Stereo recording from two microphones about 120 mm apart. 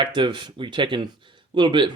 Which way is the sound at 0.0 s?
40° right (ahead or behind).